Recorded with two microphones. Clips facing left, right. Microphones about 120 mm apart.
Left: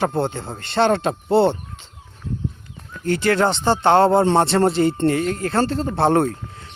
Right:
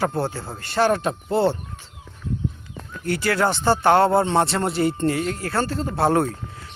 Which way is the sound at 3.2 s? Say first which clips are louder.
Left 3 dB; 25° left (ahead or behind).